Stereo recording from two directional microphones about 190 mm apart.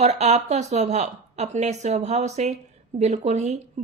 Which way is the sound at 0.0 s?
35° right (ahead or behind).